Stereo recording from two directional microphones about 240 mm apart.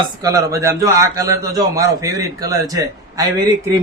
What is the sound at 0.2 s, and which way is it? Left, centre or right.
A man's voice, centre.